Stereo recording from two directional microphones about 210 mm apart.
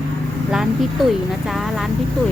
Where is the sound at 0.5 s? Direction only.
Centre (ahead or behind).